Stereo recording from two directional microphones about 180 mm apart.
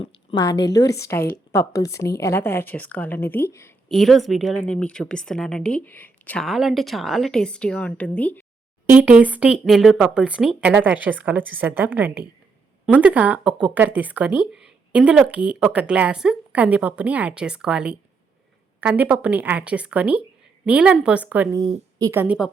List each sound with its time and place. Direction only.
0.0 s a sound: 30° left (ahead or behind)
0.4 s a woman's voice: 20° left (ahead or behind)
3.8 s a woman's voice: centre (ahead or behind)
8.9 s speech: 5° right (ahead or behind)